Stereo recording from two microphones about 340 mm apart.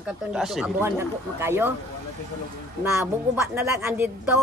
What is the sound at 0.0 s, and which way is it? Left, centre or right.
Speech, centre.